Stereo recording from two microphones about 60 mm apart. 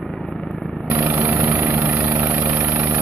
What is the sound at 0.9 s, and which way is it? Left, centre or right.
Vehicle, right.